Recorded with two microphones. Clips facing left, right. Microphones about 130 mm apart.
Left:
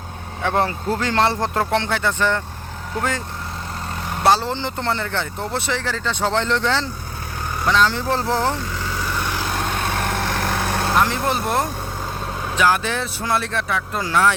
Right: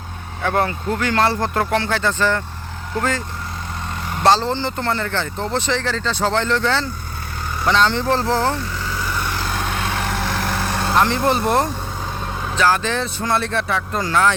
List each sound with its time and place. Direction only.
0.4 s speech: 20° left (ahead or behind)
4.2 s speech: 10° left (ahead or behind)
7.7 s speech: 5° left (ahead or behind)
9.4 s vehicle: centre (ahead or behind)
12.5 s speech: 15° left (ahead or behind)